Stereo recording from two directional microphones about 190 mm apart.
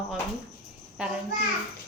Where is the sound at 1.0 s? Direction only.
5° right (ahead or behind).